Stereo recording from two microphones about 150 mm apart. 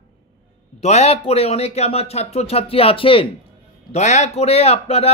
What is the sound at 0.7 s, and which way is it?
Speech, 45° left (ahead or behind).